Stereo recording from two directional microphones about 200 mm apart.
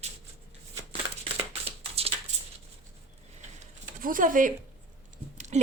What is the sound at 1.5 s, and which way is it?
Shuffling cards, 30° right (ahead or behind).